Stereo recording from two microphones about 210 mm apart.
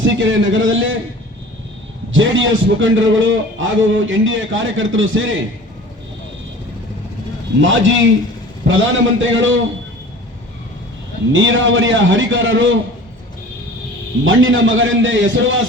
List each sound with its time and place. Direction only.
0.0 s a man's voice: 65° right (ahead or behind)
2.1 s a man's voice: 65° right (ahead or behind)
7.6 s a man's voice: 65° right (ahead or behind)
11.3 s a man's voice: 65° right (ahead or behind)
14.3 s a man's voice: 65° right (ahead or behind)